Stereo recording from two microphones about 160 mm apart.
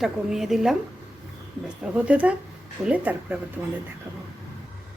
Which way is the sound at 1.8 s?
10° right (ahead or behind).